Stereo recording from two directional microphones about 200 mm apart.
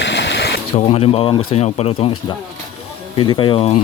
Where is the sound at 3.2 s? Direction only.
25° left (ahead or behind).